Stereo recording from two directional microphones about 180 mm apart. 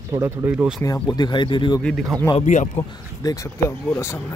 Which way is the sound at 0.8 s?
20° left (ahead or behind).